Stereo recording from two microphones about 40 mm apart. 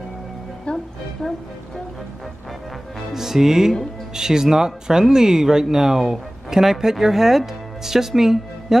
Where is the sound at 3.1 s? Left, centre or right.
Centre.